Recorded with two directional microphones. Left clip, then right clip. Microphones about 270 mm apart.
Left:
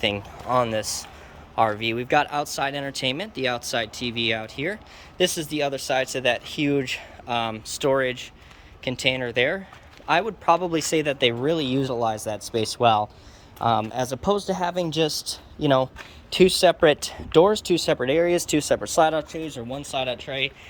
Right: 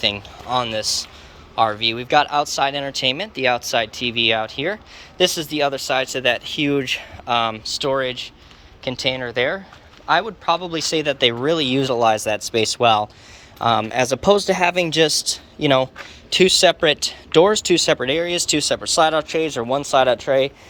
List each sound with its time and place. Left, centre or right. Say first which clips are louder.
0.0 s speech: right 4 dB; centre
14.1 s speech: right 9 dB; centre
14.8 s speech: right 7 dB; centre
19.4 s speech: right 12 dB; centre